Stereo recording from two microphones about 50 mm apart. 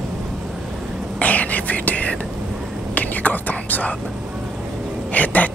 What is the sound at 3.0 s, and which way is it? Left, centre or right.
Whispering, left.